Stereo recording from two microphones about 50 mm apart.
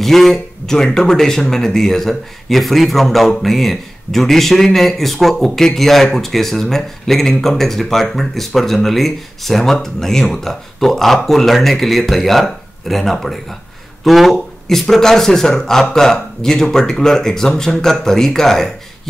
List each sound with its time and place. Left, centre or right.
0.0 s a man's voice: centre